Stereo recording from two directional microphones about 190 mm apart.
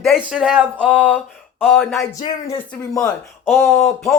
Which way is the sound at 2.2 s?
20° left (ahead or behind).